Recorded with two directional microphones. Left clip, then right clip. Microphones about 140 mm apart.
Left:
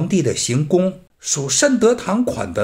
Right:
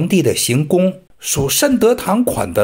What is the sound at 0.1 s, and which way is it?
Speech, 20° right (ahead or behind).